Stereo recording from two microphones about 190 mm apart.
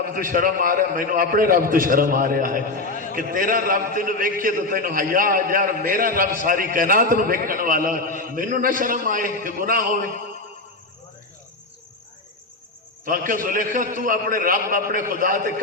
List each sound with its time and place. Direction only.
0.1 s a man's voice: 45° right (ahead or behind)
13.1 s a man's voice: 45° right (ahead or behind)